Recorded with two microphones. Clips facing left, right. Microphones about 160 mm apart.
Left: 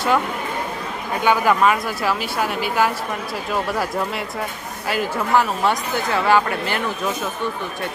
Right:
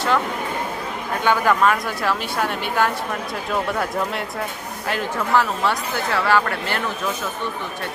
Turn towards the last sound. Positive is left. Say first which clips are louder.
# left 2 dB
turn(degrees=15)  # may be behind; listen again after turning